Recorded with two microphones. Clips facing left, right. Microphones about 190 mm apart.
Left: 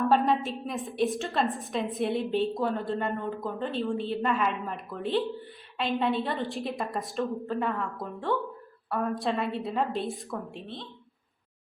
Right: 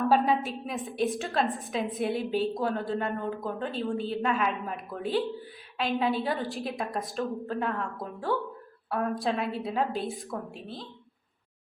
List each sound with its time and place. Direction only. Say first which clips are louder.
0.0 s a woman's voice: even; centre (ahead or behind)